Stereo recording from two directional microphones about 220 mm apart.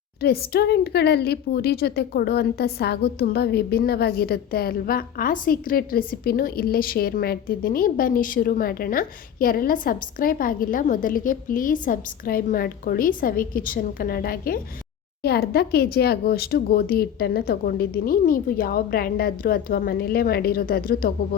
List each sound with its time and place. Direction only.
0.2 s a woman's voice: 45° left (ahead or behind)